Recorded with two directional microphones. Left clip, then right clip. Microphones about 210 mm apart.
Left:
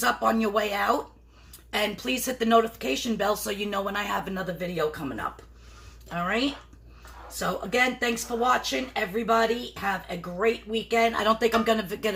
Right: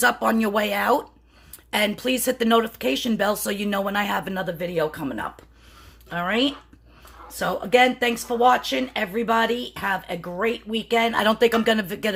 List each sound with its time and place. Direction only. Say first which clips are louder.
0.0 s speech: right 4 dB; 50° right (ahead or behind)